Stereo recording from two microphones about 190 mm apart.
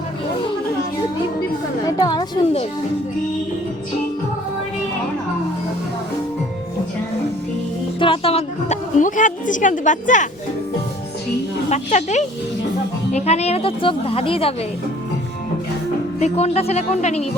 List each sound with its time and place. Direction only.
1.9 s a woman's voice: 20° left (ahead or behind)
7.9 s a woman's voice: 30° left (ahead or behind)
11.7 s a woman's voice: 35° left (ahead or behind)
16.2 s a woman's voice: 35° left (ahead or behind)